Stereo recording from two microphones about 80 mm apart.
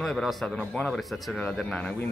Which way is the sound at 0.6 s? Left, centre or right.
Centre.